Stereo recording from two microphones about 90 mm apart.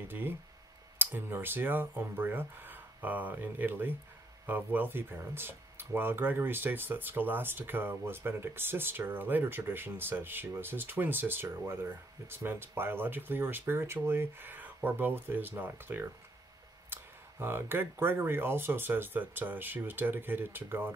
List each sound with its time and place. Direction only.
0.1 s speech: 25° right (ahead or behind)